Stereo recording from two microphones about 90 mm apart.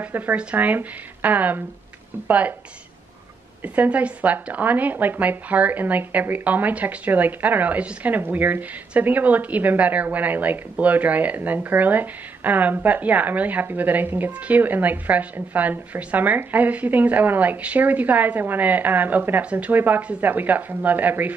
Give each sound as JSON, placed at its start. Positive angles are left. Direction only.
{"t": 0.0, "sound": "speech", "side_deg": -20}
{"t": 3.6, "sound": "speech", "side_deg": -20}